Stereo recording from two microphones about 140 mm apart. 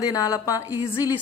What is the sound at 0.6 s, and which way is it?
Speech, 15° right (ahead or behind).